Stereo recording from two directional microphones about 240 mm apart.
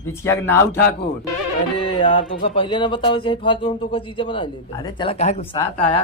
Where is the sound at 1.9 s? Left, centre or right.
Centre.